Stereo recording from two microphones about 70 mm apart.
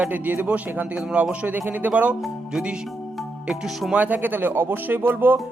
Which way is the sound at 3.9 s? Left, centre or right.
Right.